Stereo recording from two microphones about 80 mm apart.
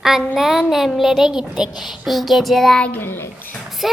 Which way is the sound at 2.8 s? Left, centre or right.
Left.